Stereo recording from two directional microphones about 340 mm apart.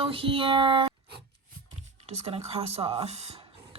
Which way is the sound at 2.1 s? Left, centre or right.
Centre.